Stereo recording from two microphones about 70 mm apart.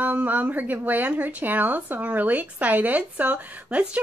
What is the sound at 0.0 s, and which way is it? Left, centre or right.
Speech, right.